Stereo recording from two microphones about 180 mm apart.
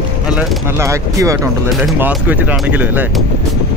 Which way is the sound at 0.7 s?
15° right (ahead or behind).